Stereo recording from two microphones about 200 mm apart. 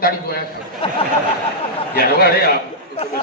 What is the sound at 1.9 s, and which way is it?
Speech, 50° left (ahead or behind).